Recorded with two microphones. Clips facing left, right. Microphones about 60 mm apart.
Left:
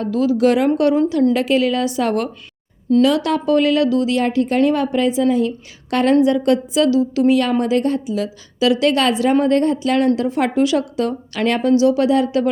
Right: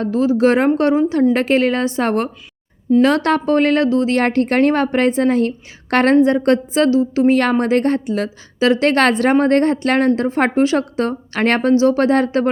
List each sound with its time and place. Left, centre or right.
0.0 s a woman's voice: right
4.2 s a woman's voice: right
7.6 s a woman's voice: right
10.2 s a woman's voice: right